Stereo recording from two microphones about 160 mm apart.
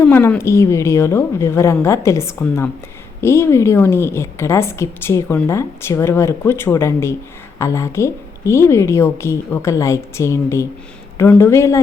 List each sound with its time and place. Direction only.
0.0 s a woman's voice: 15° left (ahead or behind)